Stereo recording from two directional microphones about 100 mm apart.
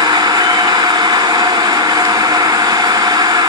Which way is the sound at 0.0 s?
40° right (ahead or behind).